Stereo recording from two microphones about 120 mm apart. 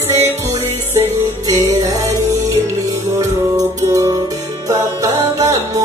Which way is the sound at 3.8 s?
25° right (ahead or behind).